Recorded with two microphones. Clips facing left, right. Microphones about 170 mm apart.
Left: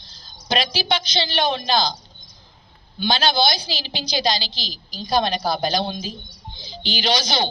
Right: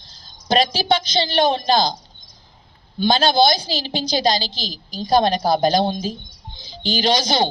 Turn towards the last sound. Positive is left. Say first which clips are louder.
# right 4 dB
turn(degrees=-45)  # may be behind; listen again after turning